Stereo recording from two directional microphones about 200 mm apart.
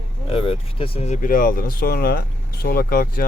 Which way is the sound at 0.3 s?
30° left (ahead or behind).